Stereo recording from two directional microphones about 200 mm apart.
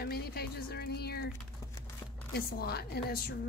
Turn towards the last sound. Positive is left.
turn(degrees=50)  # may be behind; listen again after turning